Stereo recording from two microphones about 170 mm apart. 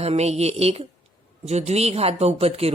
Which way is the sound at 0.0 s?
40° right (ahead or behind).